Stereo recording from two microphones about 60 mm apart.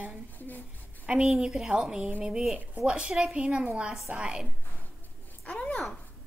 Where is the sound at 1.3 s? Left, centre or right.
Centre.